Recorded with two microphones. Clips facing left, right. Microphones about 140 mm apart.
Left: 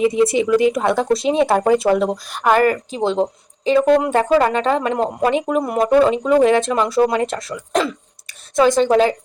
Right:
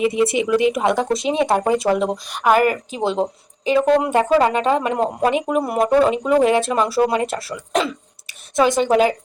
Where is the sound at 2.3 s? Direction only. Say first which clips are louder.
Left 1 dB; 5° right (ahead or behind).